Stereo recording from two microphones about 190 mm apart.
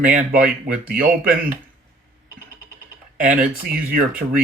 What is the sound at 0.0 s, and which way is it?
Speech, 45° right (ahead or behind).